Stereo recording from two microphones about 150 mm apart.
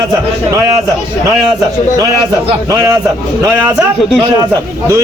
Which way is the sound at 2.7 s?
20° right (ahead or behind).